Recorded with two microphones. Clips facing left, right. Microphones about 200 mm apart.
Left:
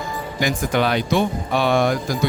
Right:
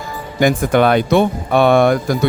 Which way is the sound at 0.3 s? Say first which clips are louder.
Right 8 dB; 55° right (ahead or behind).